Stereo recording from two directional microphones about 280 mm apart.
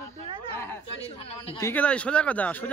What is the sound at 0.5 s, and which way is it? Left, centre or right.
Speech, centre.